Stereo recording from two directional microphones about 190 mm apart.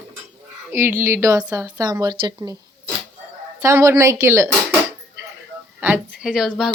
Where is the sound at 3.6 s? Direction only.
15° right (ahead or behind).